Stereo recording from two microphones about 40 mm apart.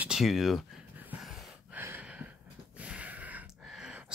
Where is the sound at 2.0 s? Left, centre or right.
Right.